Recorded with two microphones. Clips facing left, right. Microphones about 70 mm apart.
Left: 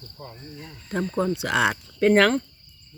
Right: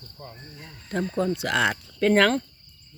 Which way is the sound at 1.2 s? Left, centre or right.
Centre.